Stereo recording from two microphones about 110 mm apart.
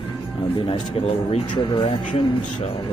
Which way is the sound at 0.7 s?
60° left (ahead or behind).